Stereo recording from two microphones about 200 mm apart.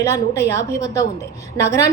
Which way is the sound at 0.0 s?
15° left (ahead or behind).